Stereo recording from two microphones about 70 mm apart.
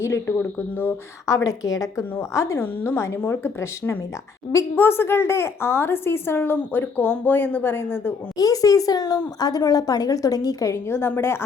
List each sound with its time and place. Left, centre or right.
0.0 s a woman's voice: left
0.3 s a woman's voice: left
1.3 s a woman's voice: left
2.6 s a woman's voice: left
8.4 s a woman's voice: left
10.8 s a woman's voice: left